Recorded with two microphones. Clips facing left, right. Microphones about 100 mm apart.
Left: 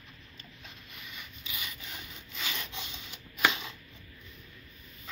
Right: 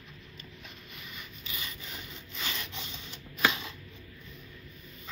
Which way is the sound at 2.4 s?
15° left (ahead or behind).